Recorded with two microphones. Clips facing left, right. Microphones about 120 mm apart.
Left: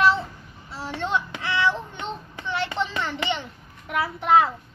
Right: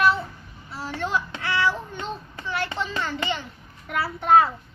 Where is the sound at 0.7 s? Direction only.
25° left (ahead or behind).